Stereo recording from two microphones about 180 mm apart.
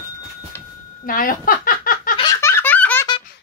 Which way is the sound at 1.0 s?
50° left (ahead or behind).